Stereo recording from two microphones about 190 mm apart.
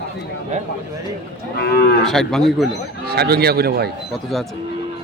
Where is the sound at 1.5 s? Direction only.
55° left (ahead or behind).